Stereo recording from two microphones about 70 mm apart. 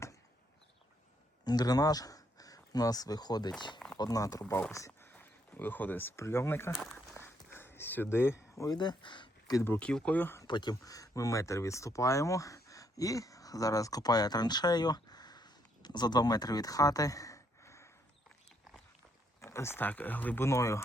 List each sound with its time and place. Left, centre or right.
1.5 s speech: left
3.9 s speech: left
4.9 s a sound: left
5.1 s speech: left
7.2 s a sound: left
8.6 s speech: left
9.8 s speech: centre
10.4 s speech: left
19.4 s a sound: left
19.9 s speech: left
20.4 s speech: left